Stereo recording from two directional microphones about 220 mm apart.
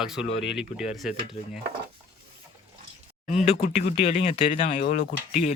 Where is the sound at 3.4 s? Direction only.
30° left (ahead or behind).